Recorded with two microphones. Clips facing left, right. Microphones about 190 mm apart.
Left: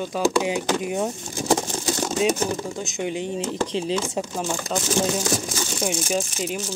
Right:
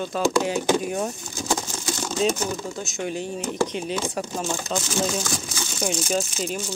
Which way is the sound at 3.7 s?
30° left (ahead or behind).